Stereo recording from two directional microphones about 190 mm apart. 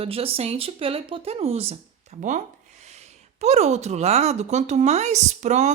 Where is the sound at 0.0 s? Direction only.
30° right (ahead or behind).